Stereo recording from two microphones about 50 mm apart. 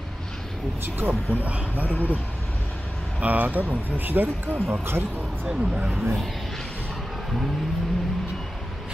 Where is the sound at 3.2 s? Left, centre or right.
Right.